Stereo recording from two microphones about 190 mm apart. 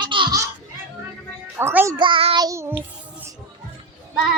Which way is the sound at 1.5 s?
10° right (ahead or behind).